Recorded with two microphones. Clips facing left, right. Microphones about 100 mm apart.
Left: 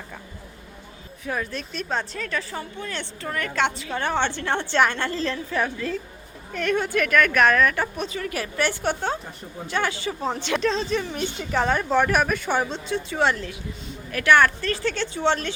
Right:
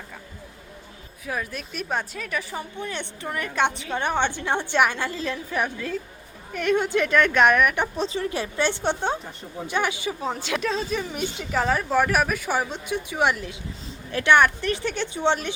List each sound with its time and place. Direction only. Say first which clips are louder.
1.2 s a woman's voice: left 2 dB; 5° right (ahead or behind)
7.9 s a woman's voice: right 2 dB; 30° right (ahead or behind)